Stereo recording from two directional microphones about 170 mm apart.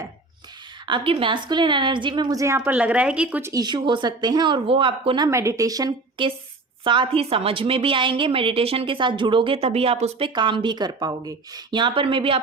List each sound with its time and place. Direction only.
0.9 s speech: 30° right (ahead or behind)
2.6 s speech: 5° right (ahead or behind)
3.5 s a woman's voice: 25° right (ahead or behind)